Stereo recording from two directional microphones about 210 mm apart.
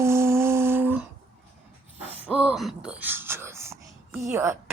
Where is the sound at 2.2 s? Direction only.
5° right (ahead or behind).